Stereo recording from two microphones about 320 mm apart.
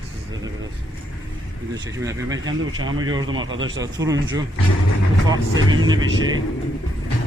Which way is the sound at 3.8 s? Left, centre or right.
Centre.